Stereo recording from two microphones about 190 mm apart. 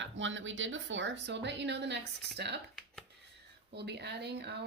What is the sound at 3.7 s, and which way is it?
Speech, 60° right (ahead or behind).